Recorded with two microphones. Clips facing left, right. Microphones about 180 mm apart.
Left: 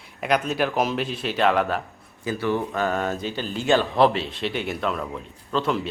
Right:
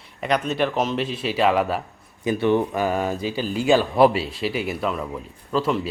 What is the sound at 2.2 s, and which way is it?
Speech, 20° right (ahead or behind).